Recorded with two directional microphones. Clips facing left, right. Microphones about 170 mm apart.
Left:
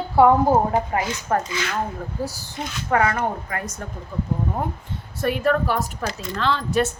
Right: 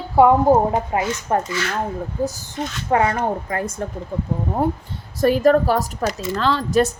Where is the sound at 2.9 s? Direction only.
25° right (ahead or behind).